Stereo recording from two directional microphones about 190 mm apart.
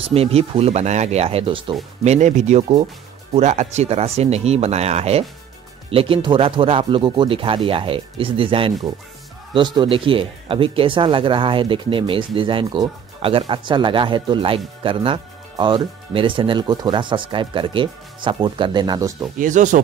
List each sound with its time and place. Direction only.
0.1 s speech: 30° right (ahead or behind)
19.3 s speech: 40° right (ahead or behind)